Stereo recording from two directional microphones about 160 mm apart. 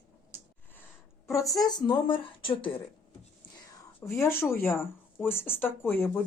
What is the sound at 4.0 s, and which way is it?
Speech, 15° left (ahead or behind).